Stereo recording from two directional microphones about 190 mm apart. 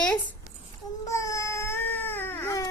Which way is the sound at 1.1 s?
15° left (ahead or behind).